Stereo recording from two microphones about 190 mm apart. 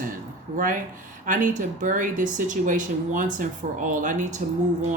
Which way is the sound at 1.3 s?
45° right (ahead or behind).